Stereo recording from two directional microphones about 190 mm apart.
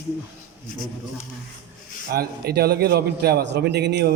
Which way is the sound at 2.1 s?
55° right (ahead or behind).